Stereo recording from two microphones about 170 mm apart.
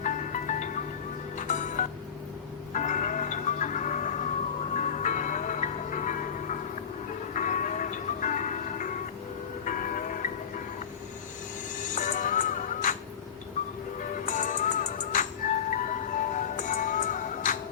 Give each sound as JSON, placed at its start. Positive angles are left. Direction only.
{"t": 0.0, "sound": "music", "side_deg": 45}
{"t": 11.8, "sound": "music", "side_deg": 50}
{"t": 14.3, "sound": "music", "side_deg": 50}